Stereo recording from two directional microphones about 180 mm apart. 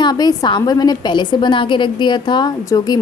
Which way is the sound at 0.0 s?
20° left (ahead or behind).